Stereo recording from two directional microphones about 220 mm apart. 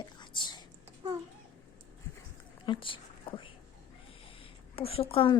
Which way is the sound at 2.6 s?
25° left (ahead or behind).